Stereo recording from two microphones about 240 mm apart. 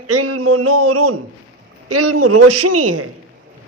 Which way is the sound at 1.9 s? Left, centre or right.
Right.